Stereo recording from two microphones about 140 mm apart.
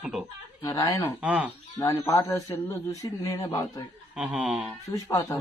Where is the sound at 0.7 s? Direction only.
20° left (ahead or behind).